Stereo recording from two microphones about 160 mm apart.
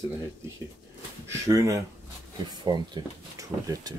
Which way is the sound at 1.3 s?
20° right (ahead or behind).